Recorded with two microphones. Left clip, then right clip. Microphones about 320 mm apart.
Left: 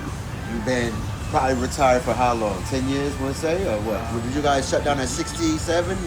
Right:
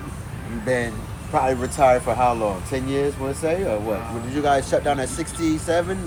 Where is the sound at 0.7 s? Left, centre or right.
Right.